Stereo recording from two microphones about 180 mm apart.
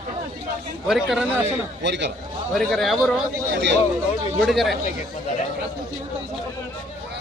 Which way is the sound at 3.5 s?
75° right (ahead or behind).